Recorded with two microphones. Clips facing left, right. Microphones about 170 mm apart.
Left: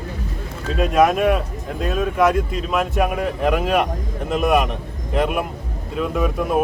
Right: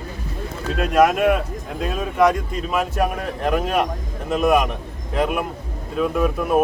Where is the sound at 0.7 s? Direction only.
Centre (ahead or behind).